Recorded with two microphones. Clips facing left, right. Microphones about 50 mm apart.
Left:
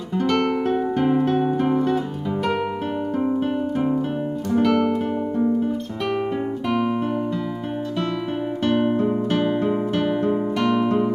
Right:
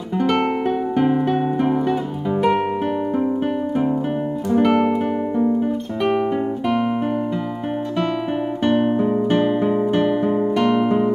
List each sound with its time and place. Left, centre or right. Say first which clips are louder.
0.2 s music: right 2 dB; centre
4.5 s music: right 3 dB; centre
8.6 s music: right 2 dB; centre
9.7 s guitar: right 4 dB; centre